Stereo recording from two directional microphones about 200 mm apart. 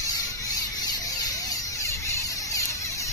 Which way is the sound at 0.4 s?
20° left (ahead or behind).